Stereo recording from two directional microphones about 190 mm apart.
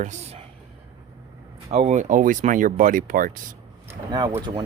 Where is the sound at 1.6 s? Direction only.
35° right (ahead or behind).